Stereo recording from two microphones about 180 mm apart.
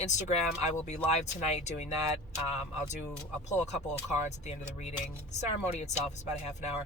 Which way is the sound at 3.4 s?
40° left (ahead or behind).